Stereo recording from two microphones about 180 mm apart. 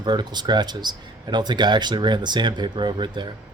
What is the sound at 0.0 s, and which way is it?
Speech, 25° right (ahead or behind).